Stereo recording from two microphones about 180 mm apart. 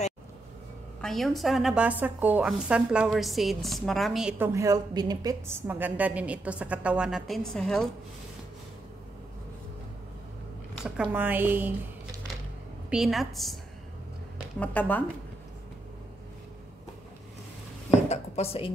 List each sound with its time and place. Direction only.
1.0 s a woman's voice: centre (ahead or behind)
4.5 s a woman's voice: 15° right (ahead or behind); by 7.9 s 5° left (ahead or behind)
10.7 s a woman's voice: 5° right (ahead or behind)
12.9 s a woman's voice: centre (ahead or behind)
14.6 s speech: 10° left (ahead or behind)
18.0 s a sound: 35° left (ahead or behind)